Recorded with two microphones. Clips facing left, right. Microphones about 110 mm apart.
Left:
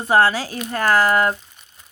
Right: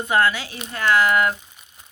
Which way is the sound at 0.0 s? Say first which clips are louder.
Left 3 dB; 35° left (ahead or behind).